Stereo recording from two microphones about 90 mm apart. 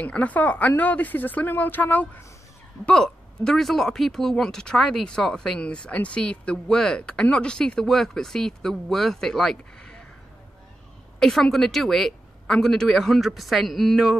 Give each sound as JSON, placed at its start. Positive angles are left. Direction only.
{"t": 0.0, "sound": "a woman's voice", "side_deg": 15}
{"t": 11.1, "sound": "speech", "side_deg": 5}